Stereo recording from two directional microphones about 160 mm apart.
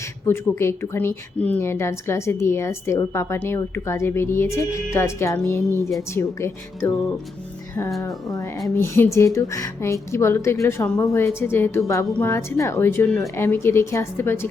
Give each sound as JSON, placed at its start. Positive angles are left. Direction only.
{"t": 0.3, "sound": "a woman's voice", "side_deg": 15}
{"t": 8.0, "sound": "a woman's voice", "side_deg": 20}